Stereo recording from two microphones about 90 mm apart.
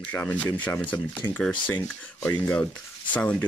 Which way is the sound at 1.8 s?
25° left (ahead or behind).